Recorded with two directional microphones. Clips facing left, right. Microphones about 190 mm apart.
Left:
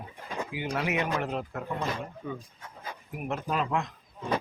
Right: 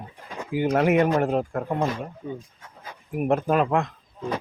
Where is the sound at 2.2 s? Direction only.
30° right (ahead or behind).